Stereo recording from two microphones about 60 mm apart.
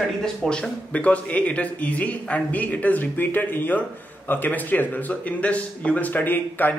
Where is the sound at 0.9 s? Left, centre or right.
Left.